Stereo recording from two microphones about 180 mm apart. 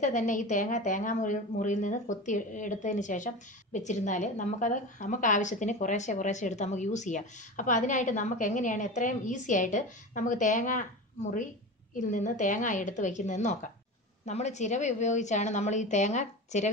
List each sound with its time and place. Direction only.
0.0 s a woman's voice: 45° left (ahead or behind)
11.9 s a woman's voice: 45° left (ahead or behind)